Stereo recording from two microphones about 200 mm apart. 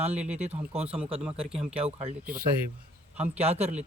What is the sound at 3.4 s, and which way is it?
Speech, 30° right (ahead or behind).